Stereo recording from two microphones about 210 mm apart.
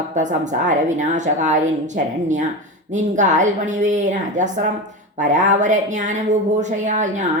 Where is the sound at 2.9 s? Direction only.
35° right (ahead or behind).